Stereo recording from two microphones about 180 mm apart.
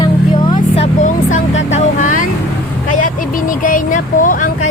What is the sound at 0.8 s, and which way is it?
Vehicle, 45° left (ahead or behind).